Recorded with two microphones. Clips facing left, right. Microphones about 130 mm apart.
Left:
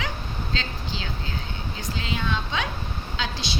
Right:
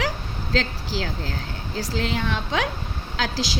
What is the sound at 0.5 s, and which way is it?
A woman's voice, 90° right.